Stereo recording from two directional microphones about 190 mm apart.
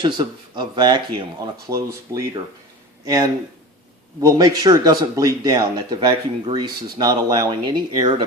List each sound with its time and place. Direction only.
0.0 s speech: 25° right (ahead or behind)